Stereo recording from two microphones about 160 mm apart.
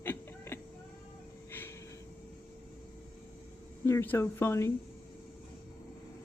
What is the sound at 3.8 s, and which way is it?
Speech, 15° left (ahead or behind).